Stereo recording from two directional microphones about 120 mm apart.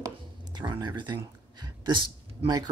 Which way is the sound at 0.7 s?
40° right (ahead or behind).